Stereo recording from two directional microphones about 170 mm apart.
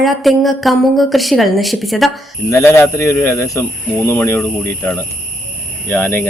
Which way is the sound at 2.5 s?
15° left (ahead or behind).